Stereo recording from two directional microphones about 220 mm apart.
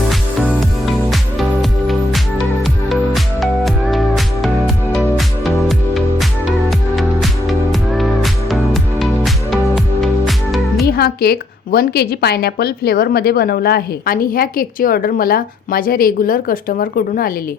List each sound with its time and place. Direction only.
0.1 s music: centre (ahead or behind)
2.9 s music: centre (ahead or behind)
10.8 s a woman's voice: 45° left (ahead or behind)